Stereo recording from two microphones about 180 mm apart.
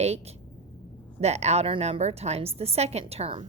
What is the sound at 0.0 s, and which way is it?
A woman's voice, 35° right (ahead or behind).